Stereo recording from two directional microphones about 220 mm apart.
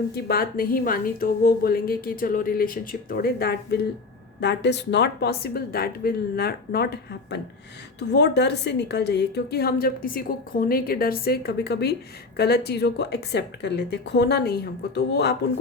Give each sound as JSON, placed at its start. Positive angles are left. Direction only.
{"t": 0.1, "sound": "a woman's voice", "side_deg": 45}